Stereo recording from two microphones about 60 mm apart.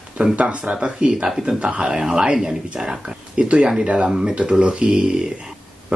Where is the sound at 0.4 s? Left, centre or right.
Right.